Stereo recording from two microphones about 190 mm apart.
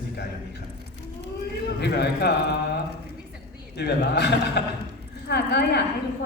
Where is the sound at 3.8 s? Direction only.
60° left (ahead or behind).